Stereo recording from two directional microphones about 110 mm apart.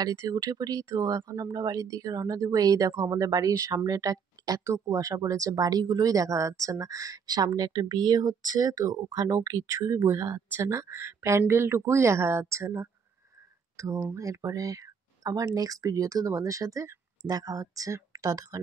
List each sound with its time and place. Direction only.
0.0 s speech: 30° right (ahead or behind)